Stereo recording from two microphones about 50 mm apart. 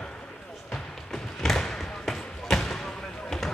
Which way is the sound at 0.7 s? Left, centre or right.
Centre.